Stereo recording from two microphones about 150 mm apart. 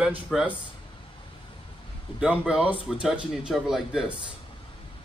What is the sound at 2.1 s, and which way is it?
Speech, 35° left (ahead or behind).